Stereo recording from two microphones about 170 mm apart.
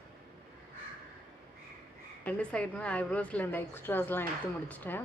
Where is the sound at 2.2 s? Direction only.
5° left (ahead or behind).